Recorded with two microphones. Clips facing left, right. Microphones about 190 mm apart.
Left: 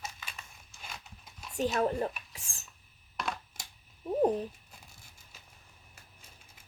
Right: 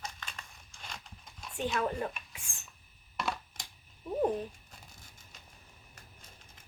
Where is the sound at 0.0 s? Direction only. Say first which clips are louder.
Even; 5° left (ahead or behind).